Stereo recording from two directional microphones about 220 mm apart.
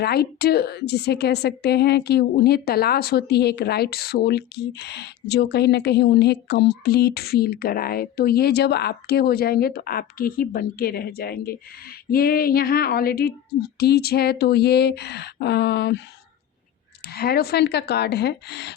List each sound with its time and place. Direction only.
0.0 s a woman's voice: 45° left (ahead or behind)
17.1 s a woman's voice: 45° left (ahead or behind)